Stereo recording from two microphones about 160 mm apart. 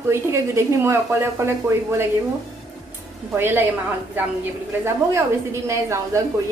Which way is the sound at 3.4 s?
15° right (ahead or behind).